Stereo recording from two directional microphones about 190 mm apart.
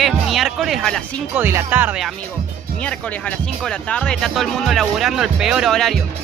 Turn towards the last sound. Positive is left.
turn(degrees=0)  # may be behind; listen again after turning